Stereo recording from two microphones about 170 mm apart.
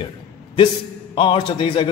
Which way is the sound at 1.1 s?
30° left (ahead or behind).